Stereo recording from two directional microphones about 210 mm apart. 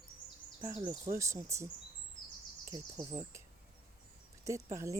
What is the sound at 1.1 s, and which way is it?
Speech, 15° right (ahead or behind).